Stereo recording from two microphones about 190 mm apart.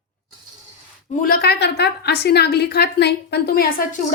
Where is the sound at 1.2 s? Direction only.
55° left (ahead or behind).